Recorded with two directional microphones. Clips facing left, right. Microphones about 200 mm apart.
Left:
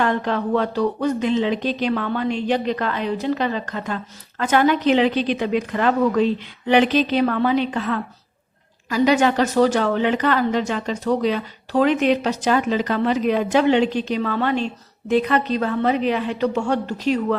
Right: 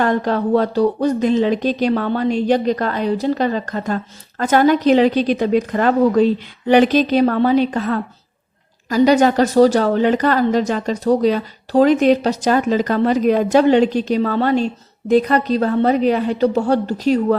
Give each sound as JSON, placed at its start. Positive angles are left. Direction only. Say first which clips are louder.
{"t": 0.0, "sound": "speech", "louder": "right 4 dB", "side_deg": -40}